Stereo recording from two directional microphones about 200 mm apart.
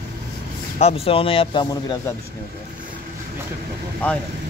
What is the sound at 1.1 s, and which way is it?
Speech, 25° left (ahead or behind).